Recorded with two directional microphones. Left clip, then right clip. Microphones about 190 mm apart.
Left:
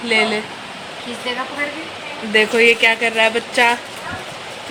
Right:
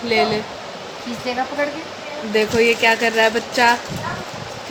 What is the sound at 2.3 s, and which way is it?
Speech, 10° left (ahead or behind).